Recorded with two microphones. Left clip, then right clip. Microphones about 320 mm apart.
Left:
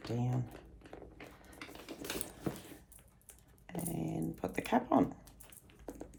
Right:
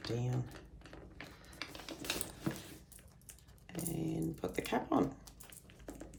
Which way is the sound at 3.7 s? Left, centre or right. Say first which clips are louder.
Even; left.